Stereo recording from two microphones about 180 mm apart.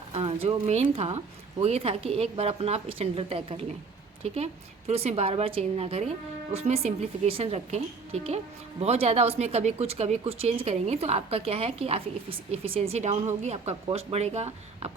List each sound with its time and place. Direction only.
0.1 s a sound: 35° right (ahead or behind)
0.4 s speech: 35° right (ahead or behind)
4.9 s speech: 35° right (ahead or behind)